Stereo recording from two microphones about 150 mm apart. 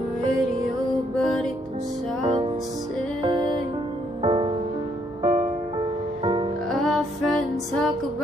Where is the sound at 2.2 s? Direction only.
35° right (ahead or behind).